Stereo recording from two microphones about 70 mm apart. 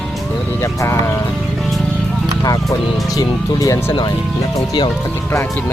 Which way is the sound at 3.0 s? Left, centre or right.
Left.